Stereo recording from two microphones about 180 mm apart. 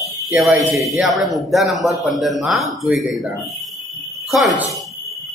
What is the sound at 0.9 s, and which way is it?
A man's voice, centre (ahead or behind).